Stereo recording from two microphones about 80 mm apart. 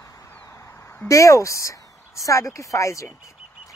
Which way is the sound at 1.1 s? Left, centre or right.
Left.